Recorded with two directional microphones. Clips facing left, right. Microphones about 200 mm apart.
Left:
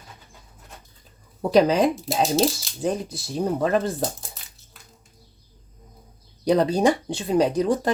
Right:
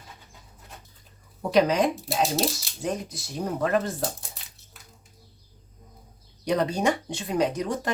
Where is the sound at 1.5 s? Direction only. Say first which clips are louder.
Left 4 dB; 35° left (ahead or behind).